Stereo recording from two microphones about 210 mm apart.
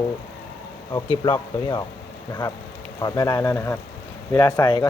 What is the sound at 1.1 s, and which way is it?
Speech, 20° left (ahead or behind).